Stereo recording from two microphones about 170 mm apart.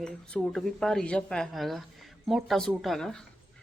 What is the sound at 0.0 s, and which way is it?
Speech, 5° left (ahead or behind).